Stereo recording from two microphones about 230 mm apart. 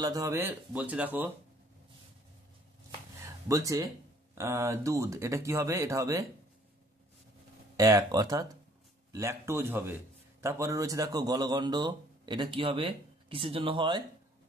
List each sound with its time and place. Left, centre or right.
0.0 s speech: centre
3.4 s speech: centre
7.7 s speech: centre